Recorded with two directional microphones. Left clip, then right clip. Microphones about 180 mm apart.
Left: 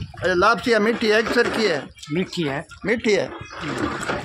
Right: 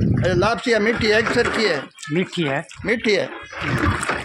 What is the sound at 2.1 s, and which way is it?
Speech, 35° right (ahead or behind).